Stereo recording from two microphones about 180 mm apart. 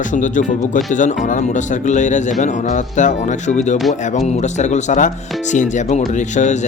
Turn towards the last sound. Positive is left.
turn(degrees=40)  # may be behind; listen again after turning